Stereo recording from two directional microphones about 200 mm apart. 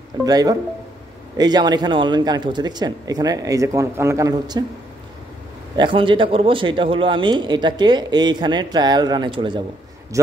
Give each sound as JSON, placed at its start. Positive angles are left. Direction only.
{"t": 0.2, "sound": "speech", "side_deg": -20}
{"t": 5.8, "sound": "a man's voice", "side_deg": -25}